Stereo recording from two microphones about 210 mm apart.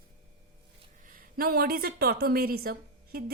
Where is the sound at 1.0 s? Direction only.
40° right (ahead or behind).